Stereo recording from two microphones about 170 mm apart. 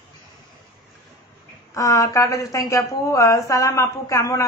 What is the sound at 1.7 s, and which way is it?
A woman's voice, 20° left (ahead or behind).